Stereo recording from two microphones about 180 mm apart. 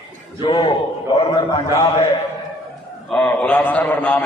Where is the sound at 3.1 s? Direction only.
5° left (ahead or behind).